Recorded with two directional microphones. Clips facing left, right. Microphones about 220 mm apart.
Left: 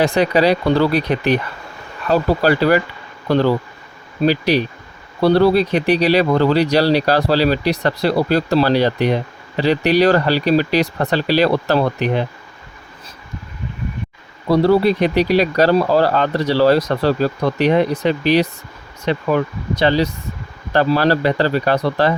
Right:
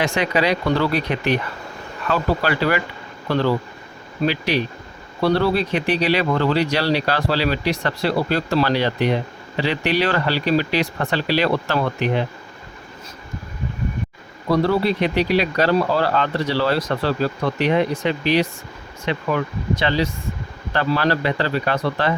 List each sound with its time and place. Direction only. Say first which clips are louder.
0.0 s speech: left 6 dB; 35° left (ahead or behind)
14.5 s speech: left 5 dB; 35° left (ahead or behind)